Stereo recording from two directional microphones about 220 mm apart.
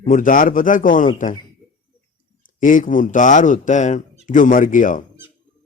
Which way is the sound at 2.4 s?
35° left (ahead or behind).